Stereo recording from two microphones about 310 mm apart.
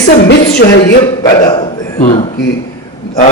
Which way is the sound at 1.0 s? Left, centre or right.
Centre.